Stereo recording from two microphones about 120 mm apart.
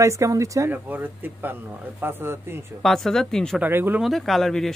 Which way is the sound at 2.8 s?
Centre (ahead or behind).